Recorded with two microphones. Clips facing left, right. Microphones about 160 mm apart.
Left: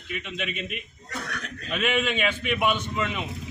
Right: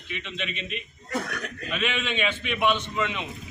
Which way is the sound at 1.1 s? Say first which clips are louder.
Right 5 dB; 45° right (ahead or behind).